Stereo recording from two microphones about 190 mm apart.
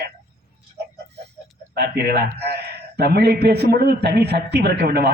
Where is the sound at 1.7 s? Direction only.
55° right (ahead or behind).